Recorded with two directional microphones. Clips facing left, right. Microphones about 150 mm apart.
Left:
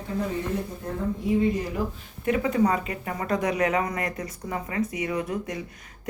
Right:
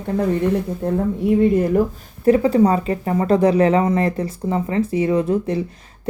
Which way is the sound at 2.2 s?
35° right (ahead or behind).